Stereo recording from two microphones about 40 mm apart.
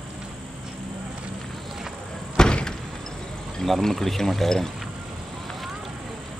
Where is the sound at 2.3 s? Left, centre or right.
Centre.